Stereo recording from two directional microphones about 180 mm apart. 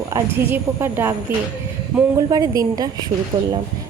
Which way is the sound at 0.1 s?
15° right (ahead or behind).